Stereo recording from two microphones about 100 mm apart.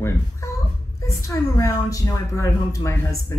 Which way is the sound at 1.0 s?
30° left (ahead or behind).